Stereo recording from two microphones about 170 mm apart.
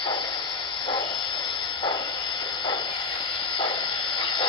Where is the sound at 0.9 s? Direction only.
30° left (ahead or behind).